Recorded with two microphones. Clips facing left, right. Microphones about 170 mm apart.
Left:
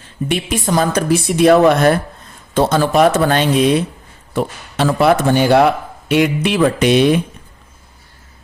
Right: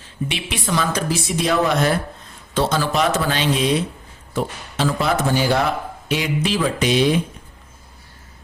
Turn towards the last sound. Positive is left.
turn(degrees=60)  # may be behind; listen again after turning